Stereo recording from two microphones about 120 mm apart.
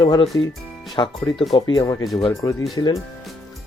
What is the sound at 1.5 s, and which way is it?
Speech, 40° left (ahead or behind).